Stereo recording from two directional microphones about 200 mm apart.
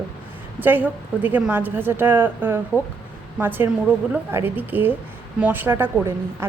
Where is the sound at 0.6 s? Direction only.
10° right (ahead or behind).